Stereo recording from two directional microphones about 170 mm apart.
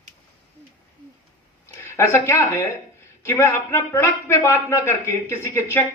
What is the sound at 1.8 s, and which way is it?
Speech, 15° left (ahead or behind).